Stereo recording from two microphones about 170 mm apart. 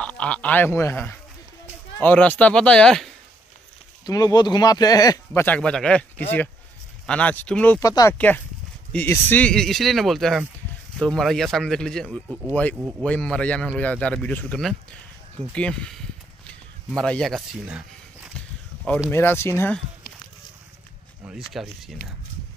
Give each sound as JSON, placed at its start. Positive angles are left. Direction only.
{"t": 0.0, "sound": "speech", "side_deg": 5}
{"t": 4.0, "sound": "speech", "side_deg": 20}
{"t": 16.4, "sound": "a sound", "side_deg": 5}
{"t": 19.0, "sound": "speech", "side_deg": 15}
{"t": 21.3, "sound": "speech", "side_deg": 0}